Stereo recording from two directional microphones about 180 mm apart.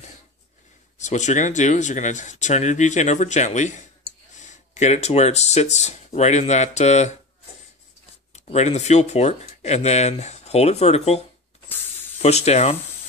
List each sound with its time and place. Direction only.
0.9 s speech: 40° left (ahead or behind)
8.3 s speech: 40° left (ahead or behind)
12.2 s speech: 35° left (ahead or behind)